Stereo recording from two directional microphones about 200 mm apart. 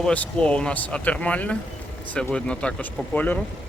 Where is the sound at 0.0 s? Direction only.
5° left (ahead or behind).